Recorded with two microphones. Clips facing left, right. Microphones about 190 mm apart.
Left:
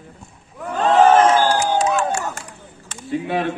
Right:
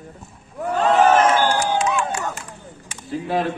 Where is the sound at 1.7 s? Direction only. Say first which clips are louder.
Left 3 dB; 40° left (ahead or behind).